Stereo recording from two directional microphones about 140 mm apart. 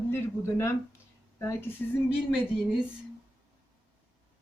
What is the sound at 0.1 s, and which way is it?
Speech, 15° left (ahead or behind).